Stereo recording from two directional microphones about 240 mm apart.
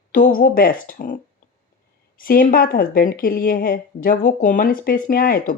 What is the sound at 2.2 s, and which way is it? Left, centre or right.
A woman's voice, left.